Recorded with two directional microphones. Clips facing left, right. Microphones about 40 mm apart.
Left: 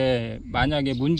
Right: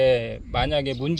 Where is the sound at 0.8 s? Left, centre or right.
Right.